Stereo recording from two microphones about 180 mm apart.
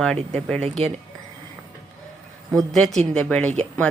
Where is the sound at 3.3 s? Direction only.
5° left (ahead or behind).